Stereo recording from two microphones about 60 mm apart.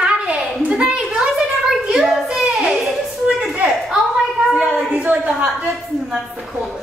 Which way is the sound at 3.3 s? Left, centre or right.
Right.